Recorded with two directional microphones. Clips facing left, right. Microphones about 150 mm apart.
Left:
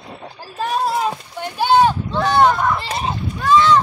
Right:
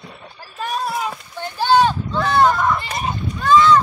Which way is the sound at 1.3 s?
15° left (ahead or behind).